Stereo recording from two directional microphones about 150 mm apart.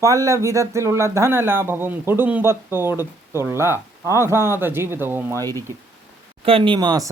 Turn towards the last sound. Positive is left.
turn(degrees=-30)  # may be behind; listen again after turning